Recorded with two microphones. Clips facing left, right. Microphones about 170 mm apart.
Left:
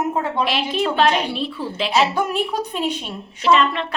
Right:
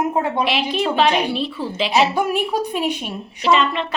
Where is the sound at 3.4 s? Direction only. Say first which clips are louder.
Even; centre (ahead or behind).